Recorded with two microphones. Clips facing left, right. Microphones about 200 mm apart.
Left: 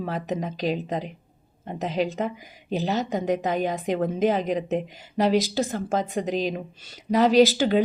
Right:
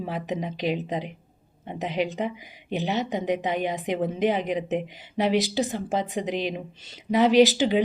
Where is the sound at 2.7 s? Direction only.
40° left (ahead or behind).